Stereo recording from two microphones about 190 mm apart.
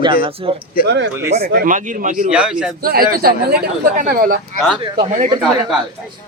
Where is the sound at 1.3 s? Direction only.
55° right (ahead or behind).